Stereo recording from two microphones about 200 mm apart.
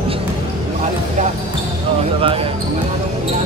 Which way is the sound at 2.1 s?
25° right (ahead or behind).